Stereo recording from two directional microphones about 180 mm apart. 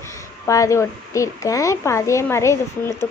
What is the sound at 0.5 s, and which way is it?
A woman's voice, 15° left (ahead or behind).